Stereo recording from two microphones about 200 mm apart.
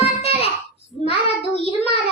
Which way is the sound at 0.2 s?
30° left (ahead or behind).